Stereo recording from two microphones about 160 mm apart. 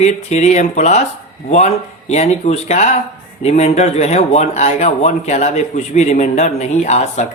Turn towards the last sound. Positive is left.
turn(degrees=45)  # may be behind; listen again after turning